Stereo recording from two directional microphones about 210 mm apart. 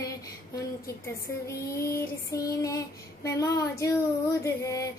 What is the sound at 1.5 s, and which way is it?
Female singing, 15° left (ahead or behind).